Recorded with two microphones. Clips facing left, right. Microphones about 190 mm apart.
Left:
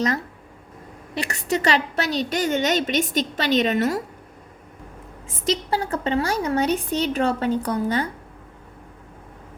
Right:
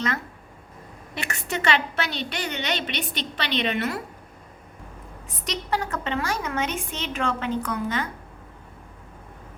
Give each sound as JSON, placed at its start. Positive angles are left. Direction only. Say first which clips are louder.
{"t": 1.1, "sound": "a woman's voice", "louder": "left 6 dB", "side_deg": 35}
{"t": 5.3, "sound": "a woman's voice", "louder": "left 5 dB", "side_deg": 30}